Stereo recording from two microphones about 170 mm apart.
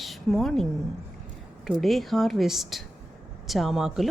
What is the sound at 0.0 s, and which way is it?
A woman's voice, centre (ahead or behind).